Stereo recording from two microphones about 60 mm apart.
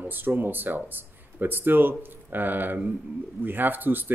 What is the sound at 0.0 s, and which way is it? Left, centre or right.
Speech, right.